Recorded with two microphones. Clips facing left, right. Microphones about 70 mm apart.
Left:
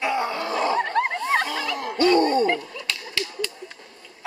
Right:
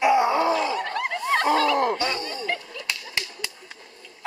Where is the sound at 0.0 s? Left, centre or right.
Centre.